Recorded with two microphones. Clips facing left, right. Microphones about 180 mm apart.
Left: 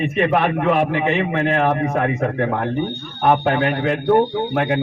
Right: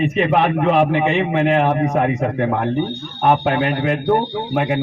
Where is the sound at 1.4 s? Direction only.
15° right (ahead or behind).